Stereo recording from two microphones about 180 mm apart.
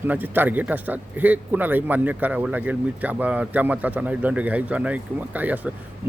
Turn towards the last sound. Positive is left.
turn(degrees=-10)  # may be behind; listen again after turning